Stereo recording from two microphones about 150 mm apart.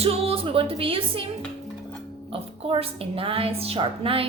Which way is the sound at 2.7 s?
35° right (ahead or behind).